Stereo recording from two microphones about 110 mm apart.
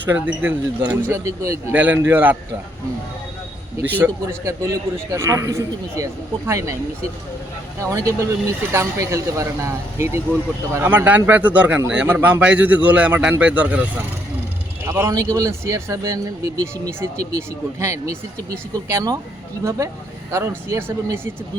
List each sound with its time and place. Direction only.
0.0 s a man's voice: 15° right (ahead or behind)
1.2 s a man's voice: 25° right (ahead or behind)
1.7 s a man's voice: 15° right (ahead or behind)
3.8 s a man's voice: 15° right (ahead or behind)
7.8 s a man's voice: 30° right (ahead or behind)
10.8 s a man's voice: 15° right (ahead or behind)
14.8 s a man's voice: 20° right (ahead or behind)
20.3 s a man's voice: 25° right (ahead or behind)